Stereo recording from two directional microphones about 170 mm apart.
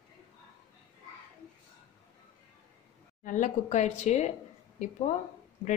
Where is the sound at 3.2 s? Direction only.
45° left (ahead or behind).